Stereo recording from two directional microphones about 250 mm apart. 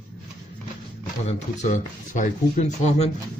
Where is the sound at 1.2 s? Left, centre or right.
Left.